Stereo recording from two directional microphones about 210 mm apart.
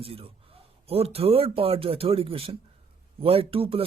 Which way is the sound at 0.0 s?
25° right (ahead or behind).